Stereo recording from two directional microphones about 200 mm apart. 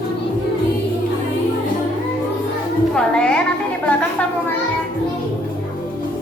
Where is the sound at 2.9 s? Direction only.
5° left (ahead or behind).